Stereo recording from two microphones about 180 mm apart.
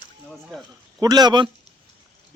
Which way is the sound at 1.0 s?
20° right (ahead or behind).